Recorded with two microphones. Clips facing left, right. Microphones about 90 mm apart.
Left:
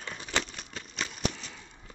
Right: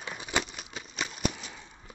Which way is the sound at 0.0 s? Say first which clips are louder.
Right 1 dB; 10° right (ahead or behind).